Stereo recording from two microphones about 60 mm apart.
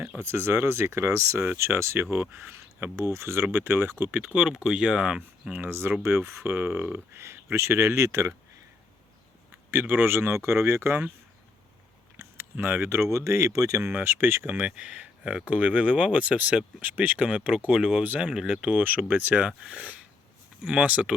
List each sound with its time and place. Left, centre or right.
0.2 s speech: right
4.4 s speech: centre
5.5 s speech: right
9.7 s speech: right
12.1 s a sound: right
12.5 s speech: right
14.0 s speech: right
14.8 s speech: right
18.7 s speech: right
19.5 s speech: centre